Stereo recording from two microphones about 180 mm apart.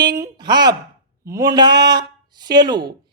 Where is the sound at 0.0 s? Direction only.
20° right (ahead or behind).